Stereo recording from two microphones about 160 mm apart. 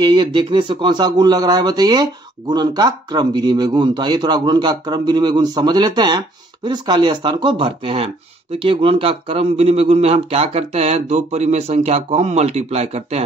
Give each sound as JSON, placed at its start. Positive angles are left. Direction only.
{"t": 0.0, "sound": "speech", "side_deg": -30}